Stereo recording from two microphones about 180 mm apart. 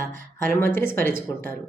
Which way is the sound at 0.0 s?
50° right (ahead or behind).